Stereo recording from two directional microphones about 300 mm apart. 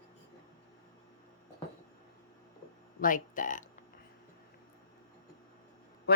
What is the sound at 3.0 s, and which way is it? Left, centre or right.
Speech, left.